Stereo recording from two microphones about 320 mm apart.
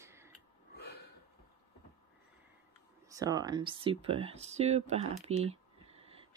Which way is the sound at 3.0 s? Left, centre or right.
Centre.